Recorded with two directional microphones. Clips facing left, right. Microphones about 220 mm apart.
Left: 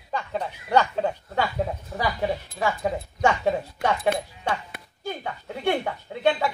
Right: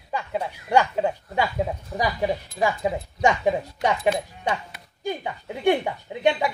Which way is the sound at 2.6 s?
15° right (ahead or behind).